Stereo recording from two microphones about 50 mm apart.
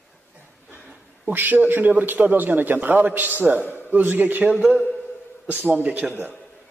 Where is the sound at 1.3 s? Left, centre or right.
Right.